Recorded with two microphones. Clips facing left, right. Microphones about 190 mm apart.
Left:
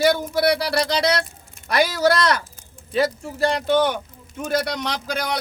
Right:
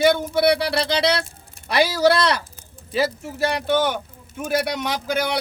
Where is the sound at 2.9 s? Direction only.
Centre (ahead or behind).